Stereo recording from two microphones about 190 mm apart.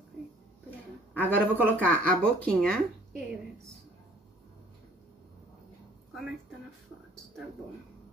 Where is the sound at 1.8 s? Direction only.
5° left (ahead or behind).